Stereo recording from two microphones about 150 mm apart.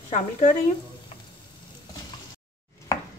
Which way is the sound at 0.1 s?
55° left (ahead or behind).